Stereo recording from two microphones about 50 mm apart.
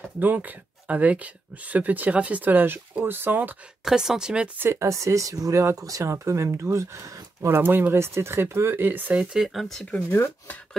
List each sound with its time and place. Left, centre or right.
0.2 s speech: right
3.8 s speech: centre
4.6 s speech: right
7.4 s speech: right
8.8 s speech: right
9.2 s speech: centre